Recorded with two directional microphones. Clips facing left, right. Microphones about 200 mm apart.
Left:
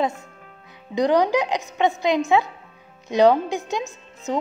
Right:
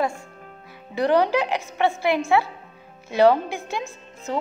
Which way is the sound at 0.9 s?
15° left (ahead or behind).